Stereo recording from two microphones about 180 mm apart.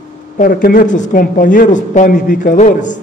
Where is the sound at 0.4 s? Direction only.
50° left (ahead or behind).